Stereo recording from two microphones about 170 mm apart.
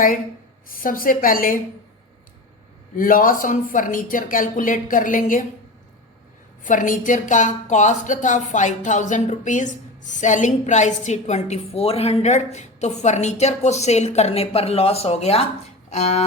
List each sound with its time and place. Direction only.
0.7 s a woman's voice: 55° left (ahead or behind)
2.9 s a woman's voice: 55° left (ahead or behind)
6.7 s a woman's voice: 50° left (ahead or behind)